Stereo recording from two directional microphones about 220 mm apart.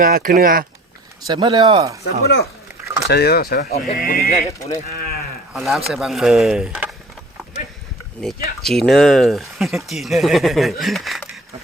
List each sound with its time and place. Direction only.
0.0 s speech: 40° right (ahead or behind)
1.3 s speech: 20° right (ahead or behind)
2.2 s speech: 45° left (ahead or behind)
4.4 s speech: 15° left (ahead or behind)
4.9 s a sound: 45° left (ahead or behind)
5.5 s speech: centre (ahead or behind)
8.2 s speech: centre (ahead or behind)